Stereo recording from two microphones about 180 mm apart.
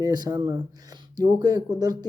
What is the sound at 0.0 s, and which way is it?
Speech, 20° right (ahead or behind).